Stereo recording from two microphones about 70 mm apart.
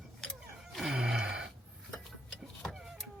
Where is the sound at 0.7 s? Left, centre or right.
Centre.